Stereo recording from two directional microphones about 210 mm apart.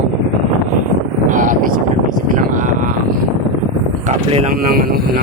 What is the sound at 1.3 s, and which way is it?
Speech, 40° right (ahead or behind).